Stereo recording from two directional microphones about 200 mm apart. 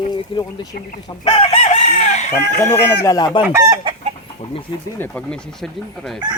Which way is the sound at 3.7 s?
25° right (ahead or behind).